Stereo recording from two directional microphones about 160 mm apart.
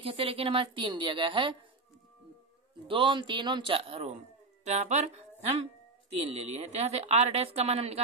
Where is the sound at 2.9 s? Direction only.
30° right (ahead or behind).